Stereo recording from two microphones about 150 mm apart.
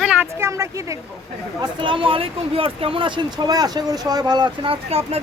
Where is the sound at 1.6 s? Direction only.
35° right (ahead or behind).